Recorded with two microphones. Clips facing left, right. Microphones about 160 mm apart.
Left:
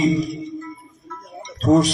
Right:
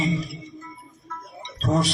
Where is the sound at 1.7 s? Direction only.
40° left (ahead or behind).